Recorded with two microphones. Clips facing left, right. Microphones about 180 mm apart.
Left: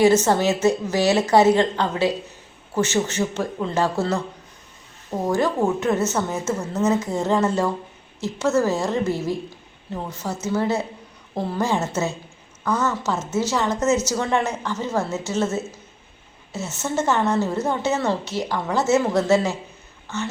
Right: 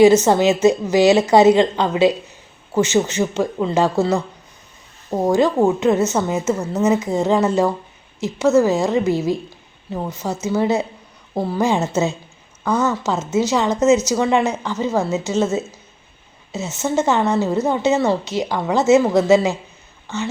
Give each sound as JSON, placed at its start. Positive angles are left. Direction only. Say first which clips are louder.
{"t": 0.0, "sound": "a woman's voice", "louder": "right 5 dB", "side_deg": -15}
{"t": 5.3, "sound": "a woman's voice", "louder": "right 5 dB", "side_deg": -20}
{"t": 10.4, "sound": "a woman's voice", "louder": "right 4 dB", "side_deg": -15}